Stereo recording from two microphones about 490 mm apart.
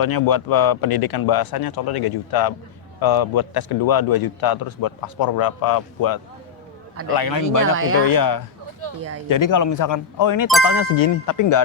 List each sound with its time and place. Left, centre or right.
0.0 s a man's voice: left
7.2 s speech: left
7.6 s speech: right
8.0 s speech: left